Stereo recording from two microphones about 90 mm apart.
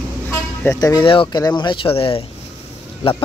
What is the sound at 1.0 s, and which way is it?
Speech, 75° left (ahead or behind).